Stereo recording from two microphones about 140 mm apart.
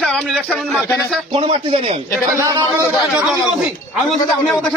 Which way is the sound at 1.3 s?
45° right (ahead or behind).